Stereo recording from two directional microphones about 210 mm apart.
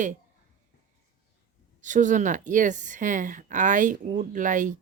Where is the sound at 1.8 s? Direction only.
35° right (ahead or behind).